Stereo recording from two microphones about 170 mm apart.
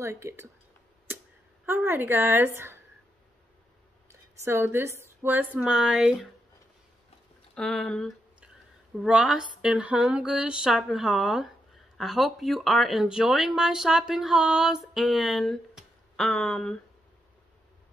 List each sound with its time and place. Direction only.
0.0 s a woman's voice: 15° right (ahead or behind)
1.7 s a woman's voice: 10° right (ahead or behind)
4.1 s a woman's voice: 15° right (ahead or behind)
7.5 s speech: 5° left (ahead or behind)